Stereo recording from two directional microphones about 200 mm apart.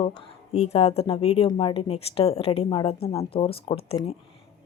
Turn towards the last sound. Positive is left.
turn(degrees=30)  # may be behind; listen again after turning